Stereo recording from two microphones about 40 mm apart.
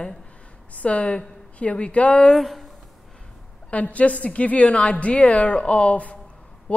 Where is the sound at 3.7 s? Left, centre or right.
Left.